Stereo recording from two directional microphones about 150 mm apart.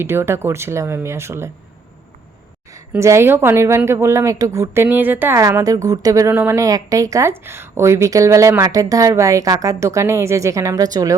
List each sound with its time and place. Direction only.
0.0 s speech: 15° right (ahead or behind)
2.9 s a woman's voice: 15° right (ahead or behind)